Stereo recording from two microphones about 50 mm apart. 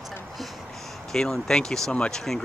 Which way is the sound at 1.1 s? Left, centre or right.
Centre.